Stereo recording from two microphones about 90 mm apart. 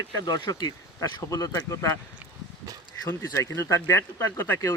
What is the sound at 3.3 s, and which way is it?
Speech, 35° left (ahead or behind).